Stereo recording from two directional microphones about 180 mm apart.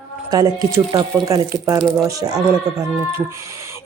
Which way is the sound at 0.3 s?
20° right (ahead or behind).